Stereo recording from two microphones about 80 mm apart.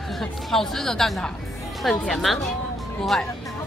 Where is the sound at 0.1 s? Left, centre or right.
Centre.